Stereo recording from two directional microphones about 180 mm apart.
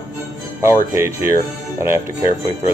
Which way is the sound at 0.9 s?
15° right (ahead or behind).